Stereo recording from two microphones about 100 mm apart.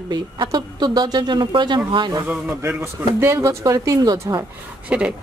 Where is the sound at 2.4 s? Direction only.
20° right (ahead or behind); by 4.4 s 40° right (ahead or behind).